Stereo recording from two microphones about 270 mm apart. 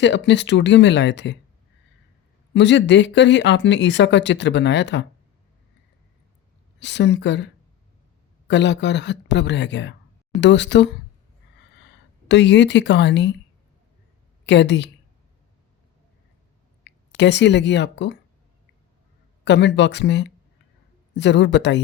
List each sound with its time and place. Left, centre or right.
0.0 s speech: left
2.5 s speech: left
6.7 s speech: left
14.4 s a woman's voice: left
16.8 s speech: left
19.5 s speech: left